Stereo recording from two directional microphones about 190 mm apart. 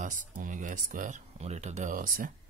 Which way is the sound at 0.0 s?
45° right (ahead or behind).